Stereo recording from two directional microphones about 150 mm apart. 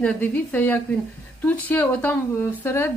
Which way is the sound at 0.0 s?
10° left (ahead or behind).